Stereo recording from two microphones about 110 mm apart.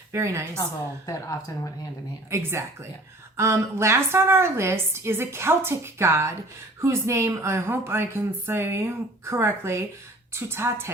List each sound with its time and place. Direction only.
0.1 s a woman's voice: 25° right (ahead or behind)
0.6 s a woman's voice: 30° left (ahead or behind)
2.3 s a woman's voice: 25° right (ahead or behind)